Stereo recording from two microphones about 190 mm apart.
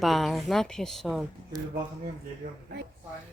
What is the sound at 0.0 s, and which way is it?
Speech, centre (ahead or behind).